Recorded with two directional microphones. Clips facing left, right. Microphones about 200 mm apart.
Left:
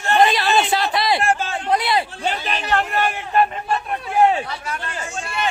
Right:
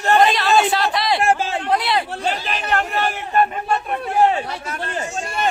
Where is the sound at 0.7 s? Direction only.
Centre (ahead or behind).